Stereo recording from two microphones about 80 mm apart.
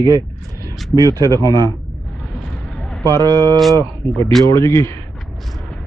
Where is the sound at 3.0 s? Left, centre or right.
Right.